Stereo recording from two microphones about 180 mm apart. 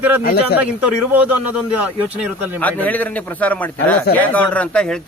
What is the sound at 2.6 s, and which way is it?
Speech, 10° left (ahead or behind).